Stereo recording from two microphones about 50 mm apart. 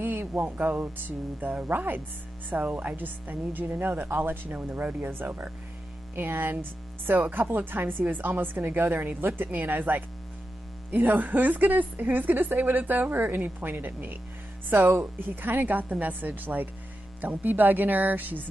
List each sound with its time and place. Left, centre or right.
0.0 s a woman's voice: right